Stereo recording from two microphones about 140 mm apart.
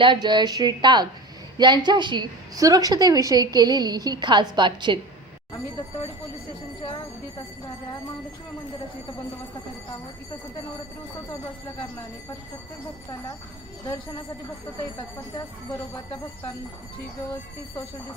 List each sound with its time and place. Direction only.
0.0 s a woman's voice: 35° right (ahead or behind)
13.8 s speech: 30° left (ahead or behind)